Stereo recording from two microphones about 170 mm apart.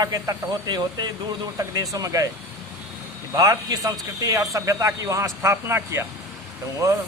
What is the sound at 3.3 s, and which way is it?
A man's voice, 20° right (ahead or behind).